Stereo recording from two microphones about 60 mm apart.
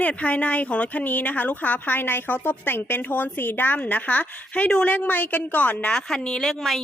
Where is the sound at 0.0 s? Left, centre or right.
Left.